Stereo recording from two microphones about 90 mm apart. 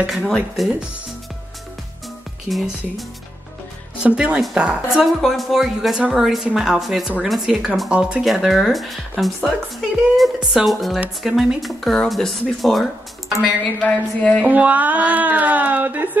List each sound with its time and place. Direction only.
0.0 s speech: centre (ahead or behind)
2.5 s speech: centre (ahead or behind)
4.0 s speech: 10° right (ahead or behind); by 14.4 s 10° left (ahead or behind)
14.4 s speech: 15° right (ahead or behind)